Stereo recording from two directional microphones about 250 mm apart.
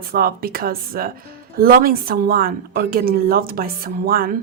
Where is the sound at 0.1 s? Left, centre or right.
Right.